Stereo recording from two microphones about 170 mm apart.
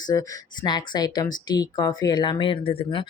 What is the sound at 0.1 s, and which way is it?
A woman's voice, 25° left (ahead or behind).